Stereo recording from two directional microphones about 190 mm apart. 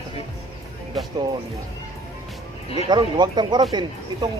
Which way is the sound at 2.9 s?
25° right (ahead or behind).